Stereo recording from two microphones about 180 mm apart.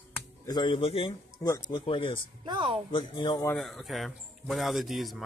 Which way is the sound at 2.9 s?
25° left (ahead or behind).